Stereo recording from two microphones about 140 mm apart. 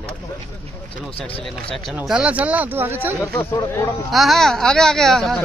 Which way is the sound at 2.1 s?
10° right (ahead or behind).